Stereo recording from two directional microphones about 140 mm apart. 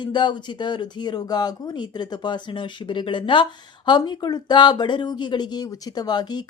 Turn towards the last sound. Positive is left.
turn(degrees=30)  # may be behind; listen again after turning